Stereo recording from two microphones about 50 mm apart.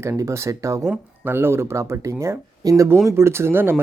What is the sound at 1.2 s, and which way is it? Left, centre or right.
Speech, right.